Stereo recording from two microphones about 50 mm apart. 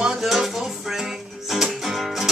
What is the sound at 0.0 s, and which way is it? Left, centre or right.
Music, centre.